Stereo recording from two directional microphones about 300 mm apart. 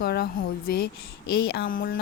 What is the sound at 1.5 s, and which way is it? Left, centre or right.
Speech, left.